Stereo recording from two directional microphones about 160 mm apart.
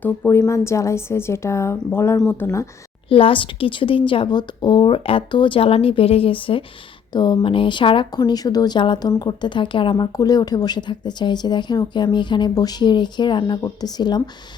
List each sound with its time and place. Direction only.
0.0 s a woman's voice: 15° left (ahead or behind)
3.1 s speech: 35° left (ahead or behind)